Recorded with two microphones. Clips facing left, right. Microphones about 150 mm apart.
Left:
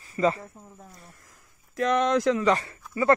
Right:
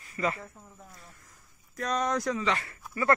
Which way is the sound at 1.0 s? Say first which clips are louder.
Left 2 dB; 70° left (ahead or behind).